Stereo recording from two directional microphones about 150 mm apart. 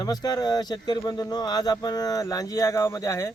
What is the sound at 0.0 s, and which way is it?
Speech, 25° left (ahead or behind).